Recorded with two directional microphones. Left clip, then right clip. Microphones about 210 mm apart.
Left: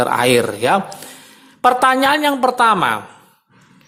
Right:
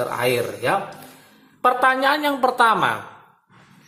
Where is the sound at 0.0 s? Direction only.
45° left (ahead or behind); by 3.0 s 30° left (ahead or behind).